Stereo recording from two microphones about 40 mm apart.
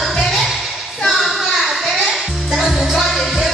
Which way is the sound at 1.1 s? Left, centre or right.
Centre.